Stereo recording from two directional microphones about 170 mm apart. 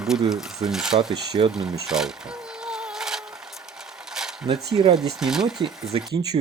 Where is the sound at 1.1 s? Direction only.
25° right (ahead or behind).